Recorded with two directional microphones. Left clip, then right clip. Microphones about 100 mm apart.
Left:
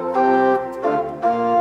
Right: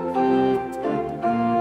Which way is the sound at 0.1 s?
35° left (ahead or behind).